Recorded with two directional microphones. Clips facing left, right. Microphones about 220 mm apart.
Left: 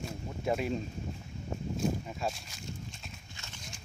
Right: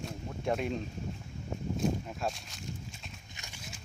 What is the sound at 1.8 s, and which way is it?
Speech, centre (ahead or behind).